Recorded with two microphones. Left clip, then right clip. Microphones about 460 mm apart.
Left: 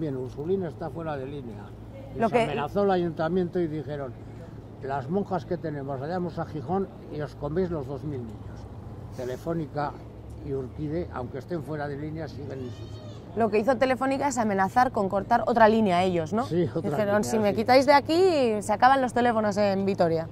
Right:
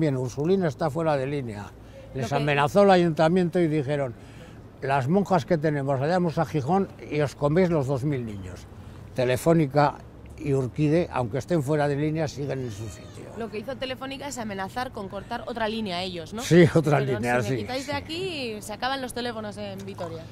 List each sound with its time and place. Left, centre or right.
0.0 s speech: right
9.2 s speech: right
13.7 s speech: centre
16.4 s speech: right
17.6 s speech: left
19.6 s a woman's voice: left